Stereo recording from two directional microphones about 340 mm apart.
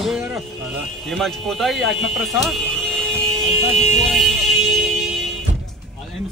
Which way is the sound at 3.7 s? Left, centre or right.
Centre.